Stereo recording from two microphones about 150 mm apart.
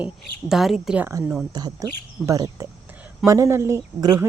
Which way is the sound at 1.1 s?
15° right (ahead or behind).